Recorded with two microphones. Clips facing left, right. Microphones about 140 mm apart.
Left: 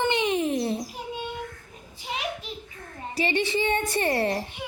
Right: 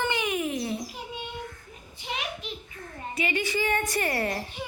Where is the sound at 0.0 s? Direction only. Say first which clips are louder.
Left 4 dB; 25° left (ahead or behind).